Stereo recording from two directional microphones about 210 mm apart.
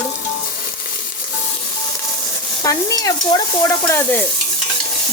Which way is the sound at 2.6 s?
15° left (ahead or behind).